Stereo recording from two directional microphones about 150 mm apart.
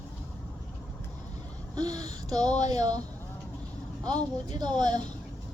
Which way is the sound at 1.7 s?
25° right (ahead or behind).